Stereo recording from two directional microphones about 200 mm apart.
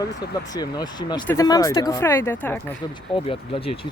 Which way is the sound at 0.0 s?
20° left (ahead or behind).